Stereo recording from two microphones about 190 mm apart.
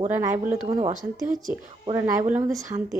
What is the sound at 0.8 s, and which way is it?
Speech, 40° right (ahead or behind).